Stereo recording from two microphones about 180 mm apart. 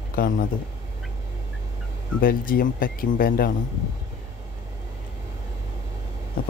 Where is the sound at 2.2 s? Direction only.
50° left (ahead or behind).